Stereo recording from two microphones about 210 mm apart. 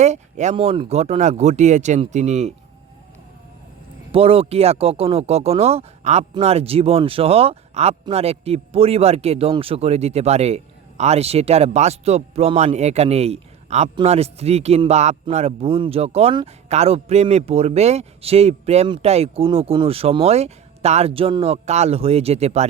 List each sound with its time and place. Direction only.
0.0 s speech: 35° right (ahead or behind)
4.1 s speech: 25° right (ahead or behind)